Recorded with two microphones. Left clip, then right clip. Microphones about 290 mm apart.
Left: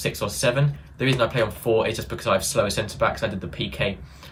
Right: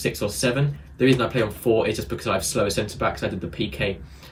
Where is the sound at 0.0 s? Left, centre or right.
Centre.